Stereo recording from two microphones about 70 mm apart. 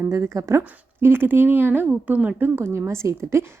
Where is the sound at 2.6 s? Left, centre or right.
Right.